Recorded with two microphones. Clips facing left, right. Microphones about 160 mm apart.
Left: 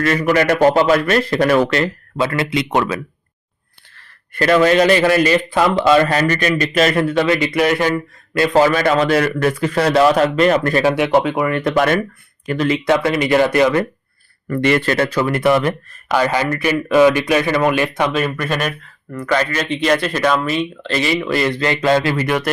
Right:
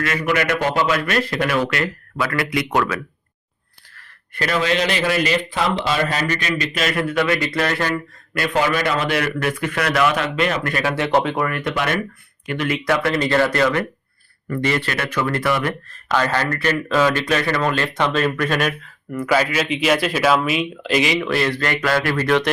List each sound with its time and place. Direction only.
0.0 s a man's voice: 40° left (ahead or behind); by 3.0 s 25° left (ahead or behind)
4.6 s a man's voice: 50° left (ahead or behind); by 7.3 s 30° left (ahead or behind)
7.3 s speech: 15° left (ahead or behind)
8.4 s a man's voice: 30° left (ahead or behind)
11.1 s speech: 5° left (ahead or behind)
12.6 s speech: 25° left (ahead or behind)
14.5 s speech: 65° left (ahead or behind)
14.8 s a man's voice: 35° left (ahead or behind)
15.2 s speech: 20° left (ahead or behind)
15.9 s speech: 10° left (ahead or behind); by 21.2 s 15° right (ahead or behind)
21.2 s speech: 5° left (ahead or behind)
21.5 s speech: 20° left (ahead or behind)